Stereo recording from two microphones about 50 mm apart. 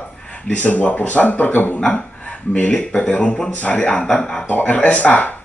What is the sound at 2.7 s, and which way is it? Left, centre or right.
Speech, left.